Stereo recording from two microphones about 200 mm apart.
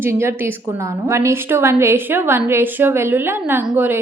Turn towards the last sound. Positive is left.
turn(degrees=-10)  # may be behind; listen again after turning